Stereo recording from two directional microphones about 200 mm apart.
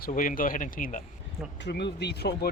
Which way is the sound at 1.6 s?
55° left (ahead or behind).